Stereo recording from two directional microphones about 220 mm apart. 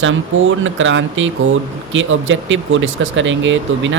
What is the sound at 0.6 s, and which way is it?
Speech, 60° right (ahead or behind).